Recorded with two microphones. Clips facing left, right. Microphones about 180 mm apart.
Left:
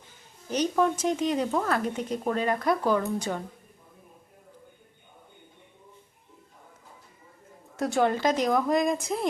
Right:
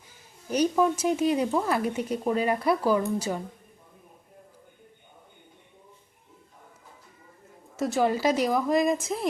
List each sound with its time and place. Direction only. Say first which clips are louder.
0.5 s speech: right 2 dB; 10° right (ahead or behind)
7.8 s a woman's voice: even; centre (ahead or behind)